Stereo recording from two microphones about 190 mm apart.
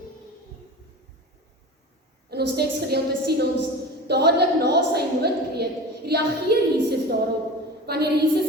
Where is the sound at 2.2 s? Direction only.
60° right (ahead or behind).